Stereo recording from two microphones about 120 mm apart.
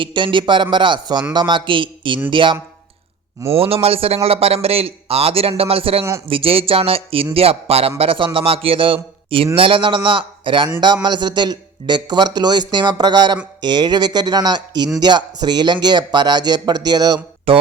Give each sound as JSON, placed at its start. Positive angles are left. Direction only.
{"t": 0.0, "sound": "a man's voice", "side_deg": -40}
{"t": 3.6, "sound": "a man's voice", "side_deg": -55}
{"t": 17.5, "sound": "speech", "side_deg": -50}